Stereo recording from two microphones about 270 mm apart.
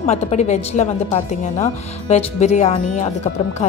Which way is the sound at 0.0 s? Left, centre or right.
Left.